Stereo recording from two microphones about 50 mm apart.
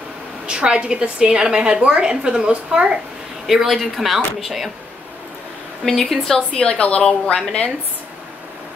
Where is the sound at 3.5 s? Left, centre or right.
Centre.